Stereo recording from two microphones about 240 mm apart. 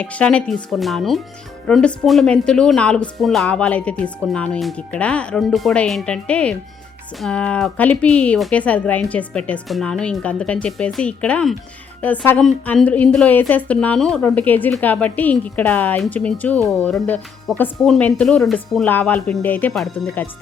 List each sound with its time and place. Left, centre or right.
0.0 s a woman's voice: centre